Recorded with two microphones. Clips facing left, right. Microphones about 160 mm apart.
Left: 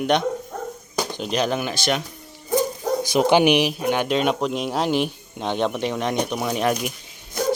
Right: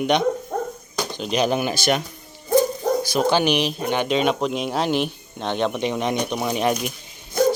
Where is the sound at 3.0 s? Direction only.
20° left (ahead or behind); by 6.6 s 5° right (ahead or behind).